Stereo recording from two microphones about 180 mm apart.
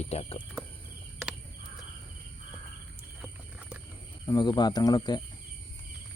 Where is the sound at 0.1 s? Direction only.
35° left (ahead or behind).